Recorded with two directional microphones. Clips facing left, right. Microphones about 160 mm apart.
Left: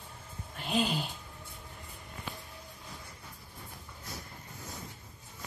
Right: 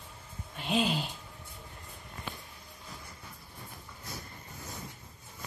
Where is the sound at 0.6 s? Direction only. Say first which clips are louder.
Right 1 dB; centre (ahead or behind).